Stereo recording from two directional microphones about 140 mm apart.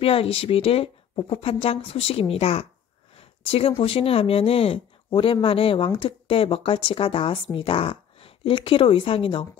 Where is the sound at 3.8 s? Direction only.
40° left (ahead or behind).